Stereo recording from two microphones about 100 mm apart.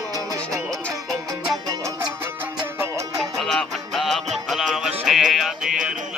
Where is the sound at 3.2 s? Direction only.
Centre (ahead or behind).